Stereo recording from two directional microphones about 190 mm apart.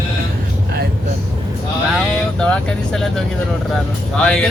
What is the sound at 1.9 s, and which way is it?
Vehicle, 5° left (ahead or behind).